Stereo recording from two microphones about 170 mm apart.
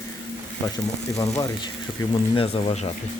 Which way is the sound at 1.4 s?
25° left (ahead or behind).